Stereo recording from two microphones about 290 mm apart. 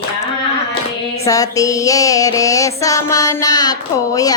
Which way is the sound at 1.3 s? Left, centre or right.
Centre.